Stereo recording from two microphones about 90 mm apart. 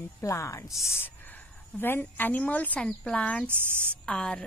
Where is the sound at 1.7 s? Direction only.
20° left (ahead or behind).